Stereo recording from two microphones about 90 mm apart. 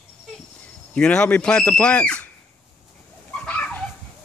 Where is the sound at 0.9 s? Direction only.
10° left (ahead or behind).